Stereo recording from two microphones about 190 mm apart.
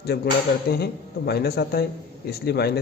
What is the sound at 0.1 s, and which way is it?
Speech, 60° left (ahead or behind).